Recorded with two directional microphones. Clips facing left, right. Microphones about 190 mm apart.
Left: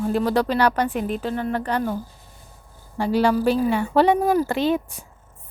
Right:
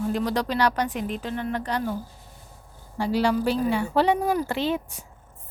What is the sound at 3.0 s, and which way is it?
A woman's voice, 55° left (ahead or behind).